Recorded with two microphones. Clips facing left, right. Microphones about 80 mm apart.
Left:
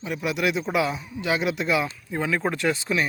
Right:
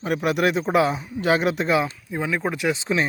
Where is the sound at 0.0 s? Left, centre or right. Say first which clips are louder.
Right 4 dB; right.